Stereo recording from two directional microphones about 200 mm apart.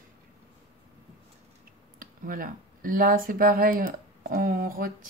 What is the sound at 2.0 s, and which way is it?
Speech, 45° right (ahead or behind).